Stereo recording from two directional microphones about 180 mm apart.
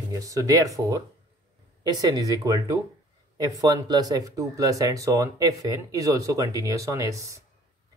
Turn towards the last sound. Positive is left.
turn(degrees=-20)  # may be behind; listen again after turning